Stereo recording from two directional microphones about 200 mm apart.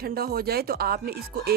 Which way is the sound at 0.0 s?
50° right (ahead or behind).